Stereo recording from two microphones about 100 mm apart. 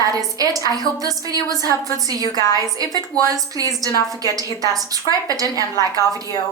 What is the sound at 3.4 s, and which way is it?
A woman's voice, 35° right (ahead or behind).